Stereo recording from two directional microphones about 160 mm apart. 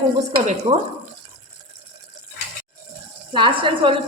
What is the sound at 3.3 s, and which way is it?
Speech, 30° right (ahead or behind).